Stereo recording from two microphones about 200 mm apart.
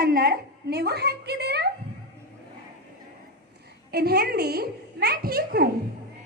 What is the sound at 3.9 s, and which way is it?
A child's voice, 50° right (ahead or behind).